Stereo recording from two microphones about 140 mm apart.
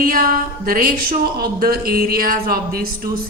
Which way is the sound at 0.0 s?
90° right.